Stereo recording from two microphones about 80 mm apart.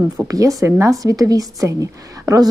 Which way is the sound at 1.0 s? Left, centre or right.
Right.